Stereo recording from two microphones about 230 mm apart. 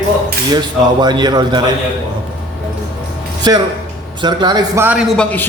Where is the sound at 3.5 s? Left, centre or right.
Centre.